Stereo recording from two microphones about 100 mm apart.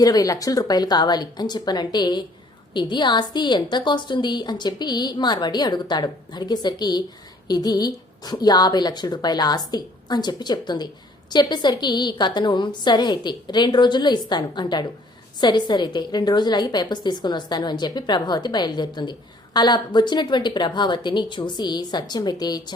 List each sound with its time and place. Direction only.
0.0 s a woman's voice: 40° left (ahead or behind)